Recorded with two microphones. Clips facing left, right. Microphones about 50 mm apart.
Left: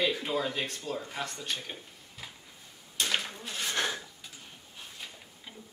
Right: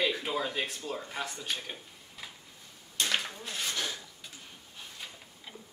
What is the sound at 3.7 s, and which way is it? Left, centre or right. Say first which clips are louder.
Speech: left 4 dB; left.